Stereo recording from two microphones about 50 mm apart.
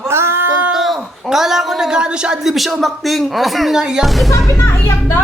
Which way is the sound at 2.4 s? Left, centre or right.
Centre.